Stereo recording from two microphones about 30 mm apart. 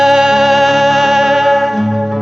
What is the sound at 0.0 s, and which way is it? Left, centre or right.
Music, centre.